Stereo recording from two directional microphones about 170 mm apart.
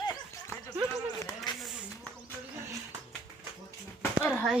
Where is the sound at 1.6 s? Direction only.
Centre (ahead or behind).